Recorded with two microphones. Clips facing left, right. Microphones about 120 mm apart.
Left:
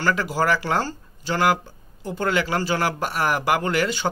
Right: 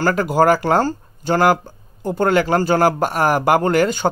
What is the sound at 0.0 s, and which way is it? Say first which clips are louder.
Speech: right 7 dB; 45° right (ahead or behind).